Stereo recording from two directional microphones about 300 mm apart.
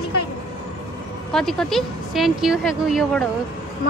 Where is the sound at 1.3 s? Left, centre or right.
Centre.